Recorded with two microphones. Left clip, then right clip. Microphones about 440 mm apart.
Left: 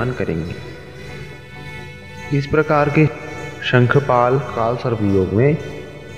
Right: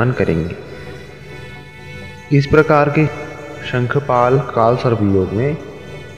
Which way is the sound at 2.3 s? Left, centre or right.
Right.